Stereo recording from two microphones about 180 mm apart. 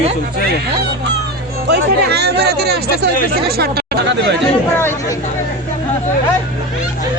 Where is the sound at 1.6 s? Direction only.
65° right (ahead or behind).